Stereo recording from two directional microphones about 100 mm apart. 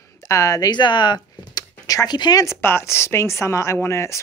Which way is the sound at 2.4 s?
25° left (ahead or behind).